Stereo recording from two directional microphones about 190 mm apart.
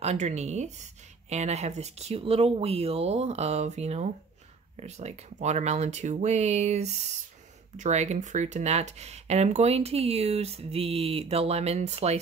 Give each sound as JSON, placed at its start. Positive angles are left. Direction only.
{"t": 0.0, "sound": "speech", "side_deg": -35}